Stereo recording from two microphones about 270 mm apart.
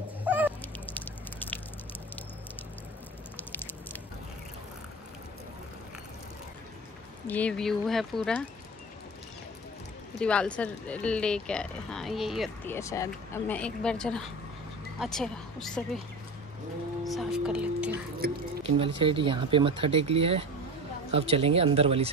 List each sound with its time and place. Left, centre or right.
0.2 s goose: centre
0.6 s goose: centre
3.3 s a sound: centre
7.2 s speech: centre
10.1 s speech: centre
17.0 s speech: centre
18.6 s speech: centre